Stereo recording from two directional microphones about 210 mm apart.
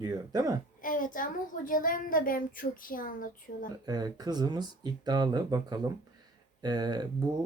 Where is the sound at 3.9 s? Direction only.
20° right (ahead or behind).